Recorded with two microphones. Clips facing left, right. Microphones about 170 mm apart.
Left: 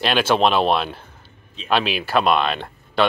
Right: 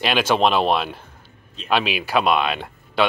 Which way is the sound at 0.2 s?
5° left (ahead or behind).